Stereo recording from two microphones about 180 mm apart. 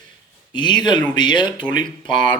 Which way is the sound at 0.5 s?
25° left (ahead or behind).